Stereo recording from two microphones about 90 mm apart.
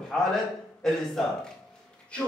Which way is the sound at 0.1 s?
5° left (ahead or behind).